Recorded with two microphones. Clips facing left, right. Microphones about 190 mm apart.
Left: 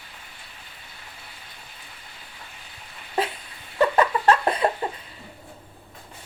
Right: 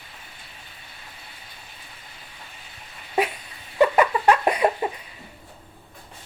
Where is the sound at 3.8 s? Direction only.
15° right (ahead or behind).